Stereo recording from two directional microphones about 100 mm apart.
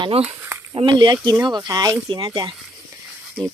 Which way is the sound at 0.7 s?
50° right (ahead or behind).